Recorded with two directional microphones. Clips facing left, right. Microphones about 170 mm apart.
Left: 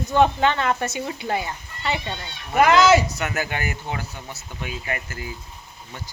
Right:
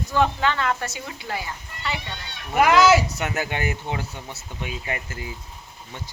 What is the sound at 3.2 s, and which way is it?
Speech, 25° right (ahead or behind).